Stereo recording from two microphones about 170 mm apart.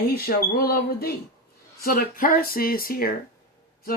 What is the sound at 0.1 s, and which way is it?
A woman's voice, 60° left (ahead or behind).